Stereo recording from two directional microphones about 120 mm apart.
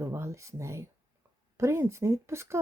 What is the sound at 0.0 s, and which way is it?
Speech, 25° right (ahead or behind).